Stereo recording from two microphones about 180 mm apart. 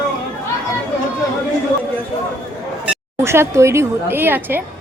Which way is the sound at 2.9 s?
15° right (ahead or behind).